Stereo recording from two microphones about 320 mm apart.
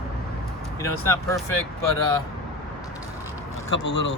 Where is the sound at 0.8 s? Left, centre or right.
Centre.